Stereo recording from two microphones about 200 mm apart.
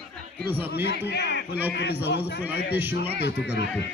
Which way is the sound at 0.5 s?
10° right (ahead or behind).